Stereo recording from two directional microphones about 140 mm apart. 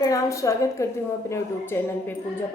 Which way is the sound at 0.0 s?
25° left (ahead or behind).